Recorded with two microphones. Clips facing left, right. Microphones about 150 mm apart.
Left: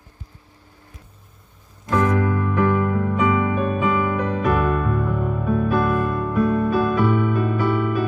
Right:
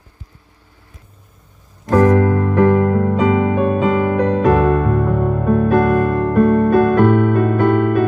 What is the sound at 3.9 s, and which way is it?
Music, 40° right (ahead or behind).